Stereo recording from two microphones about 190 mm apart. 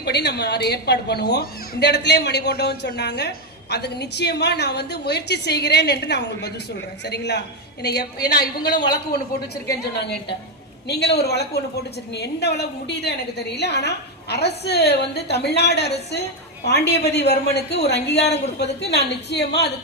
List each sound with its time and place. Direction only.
0.0 s a woman's voice: 60° left (ahead or behind)
9.6 s a woman's voice: 60° left (ahead or behind)